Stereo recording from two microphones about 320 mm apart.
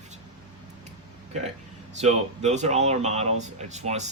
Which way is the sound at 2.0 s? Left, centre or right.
Right.